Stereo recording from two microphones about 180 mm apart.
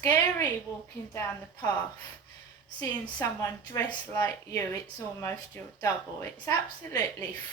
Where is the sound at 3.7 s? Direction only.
15° left (ahead or behind).